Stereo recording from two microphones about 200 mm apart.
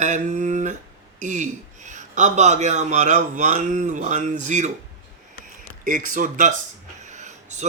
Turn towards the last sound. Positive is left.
turn(degrees=-35)  # may be behind; listen again after turning